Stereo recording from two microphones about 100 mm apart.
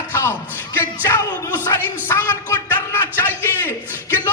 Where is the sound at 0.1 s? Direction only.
25° left (ahead or behind).